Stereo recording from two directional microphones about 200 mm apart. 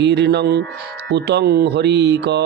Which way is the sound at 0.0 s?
60° right (ahead or behind).